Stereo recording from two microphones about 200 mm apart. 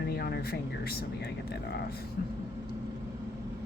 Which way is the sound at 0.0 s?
55° left (ahead or behind).